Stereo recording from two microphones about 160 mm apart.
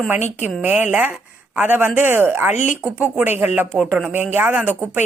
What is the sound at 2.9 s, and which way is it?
Speech, 10° right (ahead or behind).